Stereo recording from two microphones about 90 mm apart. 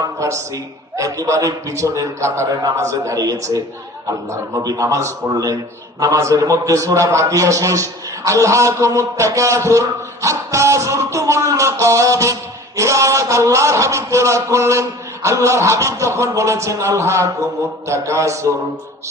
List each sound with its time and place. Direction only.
0.2 s a man's voice: 35° right (ahead or behind)